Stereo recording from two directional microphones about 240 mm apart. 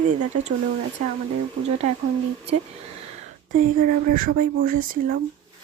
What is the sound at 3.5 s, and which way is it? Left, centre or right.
Speech, right.